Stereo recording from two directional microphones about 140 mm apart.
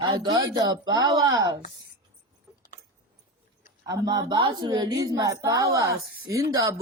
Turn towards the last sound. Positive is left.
turn(degrees=-20)  # may be behind; listen again after turning